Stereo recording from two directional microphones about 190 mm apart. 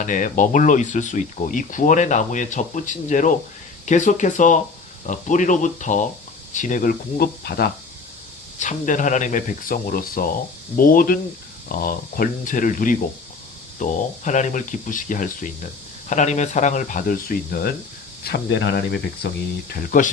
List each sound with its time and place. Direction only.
0.0 s speech: 45° left (ahead or behind)
8.5 s speech: 40° left (ahead or behind)